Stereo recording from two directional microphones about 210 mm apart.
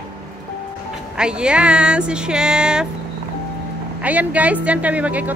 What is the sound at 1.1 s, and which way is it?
Speech, 5° right (ahead or behind).